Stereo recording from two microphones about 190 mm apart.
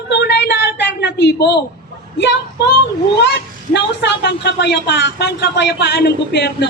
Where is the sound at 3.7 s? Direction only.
65° left (ahead or behind).